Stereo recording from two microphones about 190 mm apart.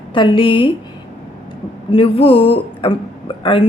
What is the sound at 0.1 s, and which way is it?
Speech, 25° left (ahead or behind).